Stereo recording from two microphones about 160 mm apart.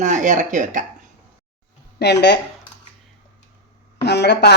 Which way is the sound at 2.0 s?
90° left.